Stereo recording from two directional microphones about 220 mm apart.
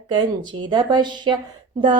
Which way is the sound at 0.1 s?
20° right (ahead or behind).